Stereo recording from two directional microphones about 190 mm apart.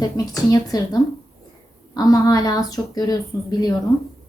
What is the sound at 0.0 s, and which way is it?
Speech, 20° left (ahead or behind).